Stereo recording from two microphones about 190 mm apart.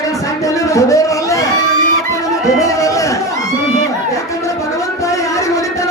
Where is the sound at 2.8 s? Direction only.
15° left (ahead or behind).